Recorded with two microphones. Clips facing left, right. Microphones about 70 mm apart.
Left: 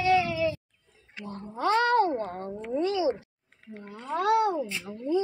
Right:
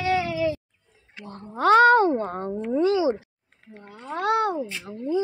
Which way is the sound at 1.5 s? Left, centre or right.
Right.